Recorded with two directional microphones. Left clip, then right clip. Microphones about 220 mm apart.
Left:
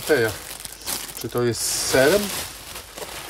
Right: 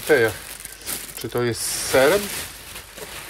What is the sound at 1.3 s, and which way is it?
Speech, 25° left (ahead or behind).